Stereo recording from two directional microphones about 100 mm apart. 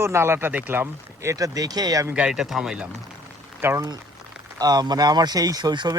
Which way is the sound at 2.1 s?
5° right (ahead or behind).